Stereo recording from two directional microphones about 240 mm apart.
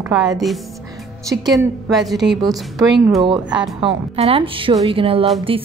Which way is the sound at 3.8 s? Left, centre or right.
Right.